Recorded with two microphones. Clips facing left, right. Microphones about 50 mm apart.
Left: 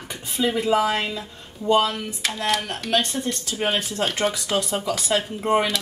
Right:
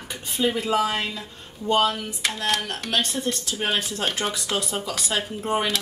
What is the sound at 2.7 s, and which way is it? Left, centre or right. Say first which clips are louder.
Speech: left 3 dB; centre.